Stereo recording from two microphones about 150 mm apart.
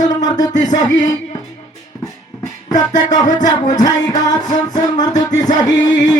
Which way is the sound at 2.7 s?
25° left (ahead or behind).